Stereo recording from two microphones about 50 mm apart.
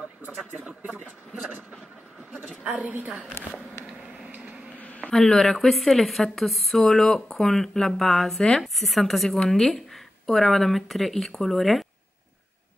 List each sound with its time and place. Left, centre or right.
2.6 s a woman's voice: right
4.2 s a sound: right
4.7 s insect: left
5.1 s speech: centre